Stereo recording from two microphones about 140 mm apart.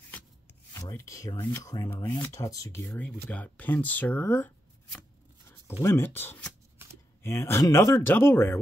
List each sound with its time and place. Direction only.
0.7 s speech: 20° left (ahead or behind)
2.9 s speech: 5° left (ahead or behind)
5.5 s speech: 15° left (ahead or behind)